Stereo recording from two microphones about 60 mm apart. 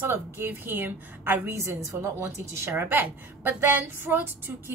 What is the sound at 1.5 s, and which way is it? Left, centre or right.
Speech, right.